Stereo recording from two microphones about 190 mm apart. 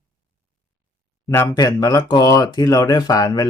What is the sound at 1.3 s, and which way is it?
Speech, 15° left (ahead or behind).